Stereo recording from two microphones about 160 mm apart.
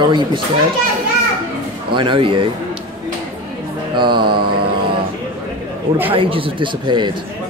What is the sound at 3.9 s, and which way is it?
Speech, 30° right (ahead or behind).